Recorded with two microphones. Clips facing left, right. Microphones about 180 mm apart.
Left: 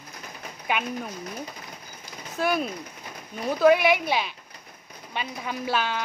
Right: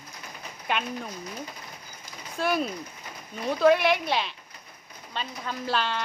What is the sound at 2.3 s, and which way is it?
Speech, centre (ahead or behind).